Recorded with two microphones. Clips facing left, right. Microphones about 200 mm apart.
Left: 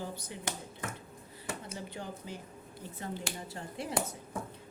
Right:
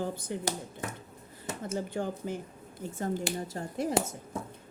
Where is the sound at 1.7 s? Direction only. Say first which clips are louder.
Right 9 dB; 50° right (ahead or behind).